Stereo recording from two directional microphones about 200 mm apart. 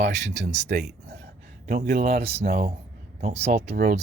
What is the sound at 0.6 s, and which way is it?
Speech, 55° right (ahead or behind).